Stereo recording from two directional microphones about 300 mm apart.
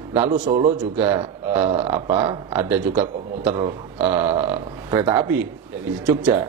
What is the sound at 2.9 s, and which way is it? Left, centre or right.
A man's voice, right.